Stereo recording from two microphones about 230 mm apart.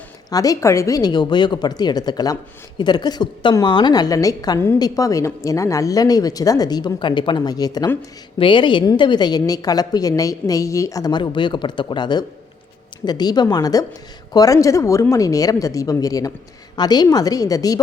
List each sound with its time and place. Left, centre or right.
0.3 s a woman's voice: centre